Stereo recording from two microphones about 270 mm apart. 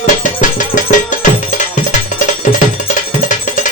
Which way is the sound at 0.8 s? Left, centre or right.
Left.